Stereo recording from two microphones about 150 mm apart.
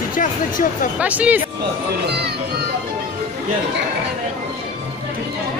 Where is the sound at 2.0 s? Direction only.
90° right.